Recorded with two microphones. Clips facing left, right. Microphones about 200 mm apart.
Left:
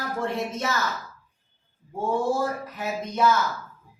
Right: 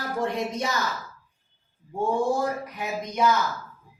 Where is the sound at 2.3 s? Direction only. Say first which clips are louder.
Even; 15° right (ahead or behind).